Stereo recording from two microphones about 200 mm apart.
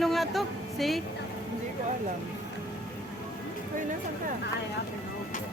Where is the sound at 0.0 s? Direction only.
Centre (ahead or behind).